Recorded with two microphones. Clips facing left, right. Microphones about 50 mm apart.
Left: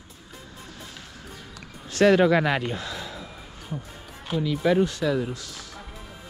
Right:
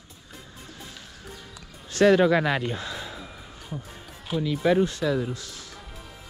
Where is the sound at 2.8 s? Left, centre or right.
Right.